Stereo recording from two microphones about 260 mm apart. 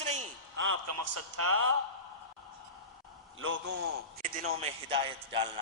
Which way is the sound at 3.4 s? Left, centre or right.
Right.